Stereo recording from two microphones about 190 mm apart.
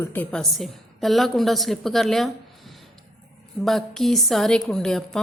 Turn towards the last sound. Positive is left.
turn(degrees=5)  # may be behind; listen again after turning